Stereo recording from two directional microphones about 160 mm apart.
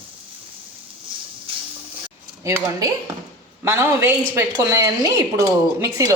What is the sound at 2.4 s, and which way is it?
A woman's voice, 20° right (ahead or behind).